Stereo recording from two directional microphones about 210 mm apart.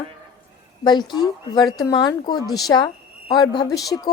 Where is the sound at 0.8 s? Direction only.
20° left (ahead or behind).